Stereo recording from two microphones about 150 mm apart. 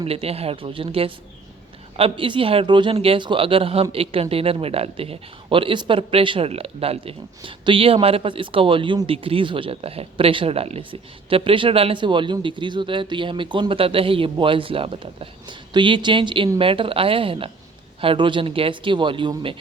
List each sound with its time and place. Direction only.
0.0 s speech: 40° right (ahead or behind)